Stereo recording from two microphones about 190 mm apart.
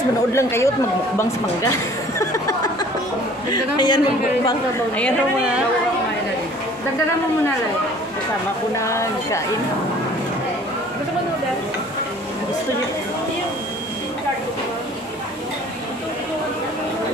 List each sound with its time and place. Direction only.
0.3 s speech: 15° left (ahead or behind)
2.1 s a man's voice: 15° left (ahead or behind)
8.7 s speech: 15° left (ahead or behind)